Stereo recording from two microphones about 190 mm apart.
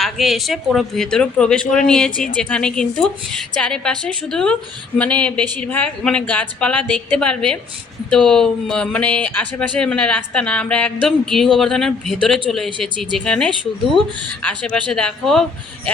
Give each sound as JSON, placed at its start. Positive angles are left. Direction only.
{"t": 0.0, "sound": "speech", "side_deg": 0}